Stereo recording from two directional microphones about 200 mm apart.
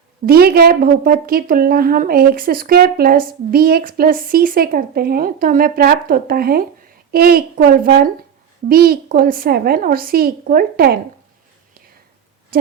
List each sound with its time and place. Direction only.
0.3 s a woman's voice: 50° right (ahead or behind)